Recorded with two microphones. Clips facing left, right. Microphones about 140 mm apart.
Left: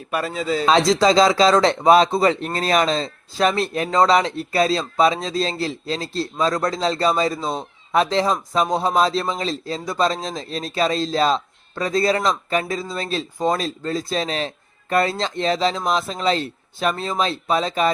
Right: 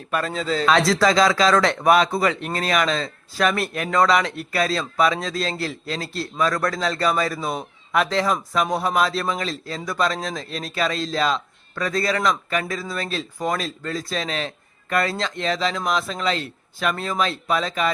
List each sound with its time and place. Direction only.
0.1 s a man's voice: 5° left (ahead or behind)
0.6 s speech: 25° left (ahead or behind)